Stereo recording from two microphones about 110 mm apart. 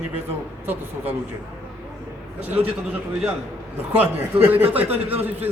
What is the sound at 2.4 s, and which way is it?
Speech, 15° right (ahead or behind).